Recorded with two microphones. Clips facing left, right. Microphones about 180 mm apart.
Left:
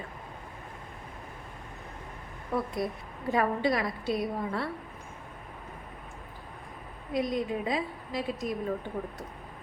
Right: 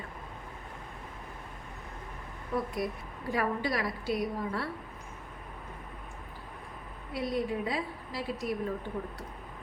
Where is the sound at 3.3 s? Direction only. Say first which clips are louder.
Left 4 dB; 25° left (ahead or behind).